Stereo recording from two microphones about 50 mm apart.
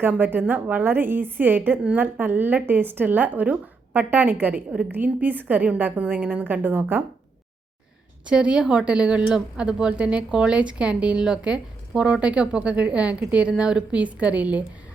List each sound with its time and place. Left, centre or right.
0.2 s a woman's voice: right
8.3 s a woman's voice: centre